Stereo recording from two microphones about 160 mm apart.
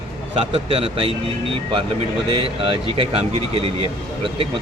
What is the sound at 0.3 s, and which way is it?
Speech, 35° right (ahead or behind).